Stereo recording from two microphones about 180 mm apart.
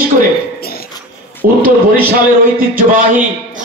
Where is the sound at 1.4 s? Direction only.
50° right (ahead or behind).